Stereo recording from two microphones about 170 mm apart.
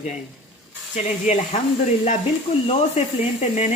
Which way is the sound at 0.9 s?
45° left (ahead or behind).